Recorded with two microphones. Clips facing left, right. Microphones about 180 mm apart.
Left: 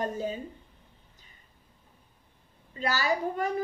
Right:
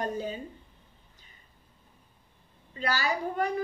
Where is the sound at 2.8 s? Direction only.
45° left (ahead or behind).